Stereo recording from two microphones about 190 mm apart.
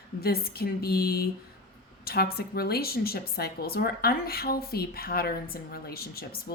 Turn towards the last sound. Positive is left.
turn(degrees=55)  # may be behind; listen again after turning